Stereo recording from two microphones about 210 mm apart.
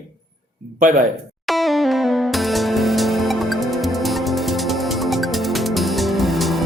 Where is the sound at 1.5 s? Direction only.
Centre (ahead or behind).